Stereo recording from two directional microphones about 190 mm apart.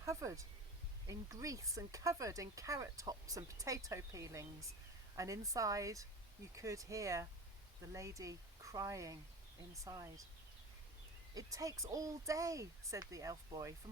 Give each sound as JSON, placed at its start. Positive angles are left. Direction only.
{"t": 0.0, "sound": "speech", "side_deg": -15}
{"t": 11.3, "sound": "speech", "side_deg": -20}